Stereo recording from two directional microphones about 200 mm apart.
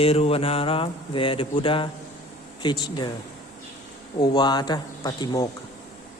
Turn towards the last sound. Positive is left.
turn(degrees=20)  # may be behind; listen again after turning